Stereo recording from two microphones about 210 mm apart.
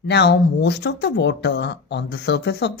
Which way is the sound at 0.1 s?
55° left (ahead or behind).